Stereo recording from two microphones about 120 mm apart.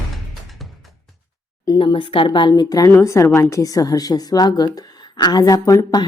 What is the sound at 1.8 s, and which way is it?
A woman's voice, 45° left (ahead or behind).